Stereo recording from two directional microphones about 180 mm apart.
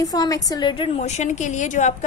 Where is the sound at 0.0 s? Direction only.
20° left (ahead or behind).